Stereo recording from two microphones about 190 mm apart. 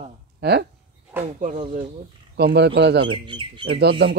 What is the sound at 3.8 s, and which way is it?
Speech, 60° right (ahead or behind).